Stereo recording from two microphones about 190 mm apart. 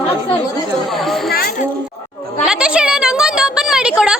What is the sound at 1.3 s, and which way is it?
Speech, 55° left (ahead or behind).